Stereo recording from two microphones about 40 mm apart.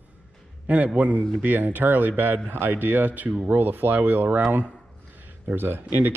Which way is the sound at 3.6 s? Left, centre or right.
Right.